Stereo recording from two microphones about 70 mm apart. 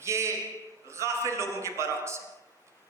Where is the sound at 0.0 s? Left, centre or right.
Right.